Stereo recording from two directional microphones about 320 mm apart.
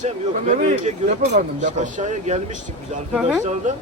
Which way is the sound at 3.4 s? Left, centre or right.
Right.